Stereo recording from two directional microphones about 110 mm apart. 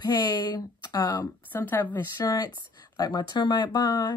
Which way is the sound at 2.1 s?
35° left (ahead or behind).